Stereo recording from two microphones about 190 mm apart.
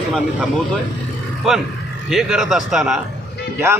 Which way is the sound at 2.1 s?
Centre (ahead or behind).